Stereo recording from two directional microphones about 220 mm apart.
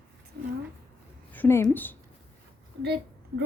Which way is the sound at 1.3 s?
10° left (ahead or behind).